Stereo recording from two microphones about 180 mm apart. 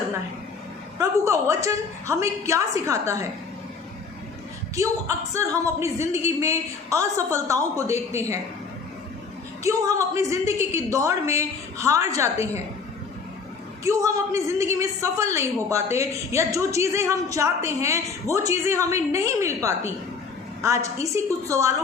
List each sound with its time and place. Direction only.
0.9 s a woman's voice: 15° right (ahead or behind)
4.7 s a woman's voice: 15° right (ahead or behind)
9.6 s a woman's voice: 15° right (ahead or behind)
13.8 s a woman's voice: 15° right (ahead or behind)